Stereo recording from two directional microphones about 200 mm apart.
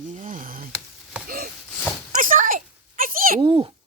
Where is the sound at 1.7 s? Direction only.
10° left (ahead or behind).